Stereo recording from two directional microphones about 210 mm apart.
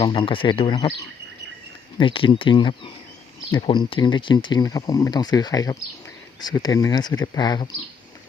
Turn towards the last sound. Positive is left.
turn(degrees=20)  # may be behind; listen again after turning